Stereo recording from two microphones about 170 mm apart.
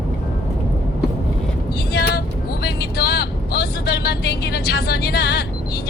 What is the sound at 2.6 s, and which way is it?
Speech, 70° left (ahead or behind).